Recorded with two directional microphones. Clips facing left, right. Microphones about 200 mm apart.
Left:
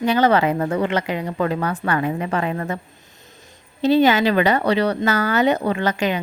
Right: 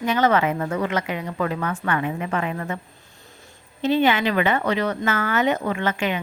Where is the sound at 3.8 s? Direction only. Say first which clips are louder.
Left 4 dB; 40° left (ahead or behind).